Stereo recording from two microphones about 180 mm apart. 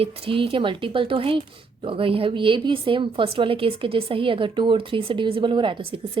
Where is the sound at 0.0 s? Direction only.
30° right (ahead or behind).